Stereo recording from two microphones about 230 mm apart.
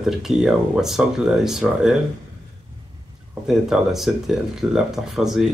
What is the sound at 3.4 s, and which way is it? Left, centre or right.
Speech, centre.